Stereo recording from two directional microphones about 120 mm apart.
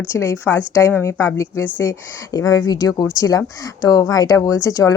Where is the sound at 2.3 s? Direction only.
30° left (ahead or behind).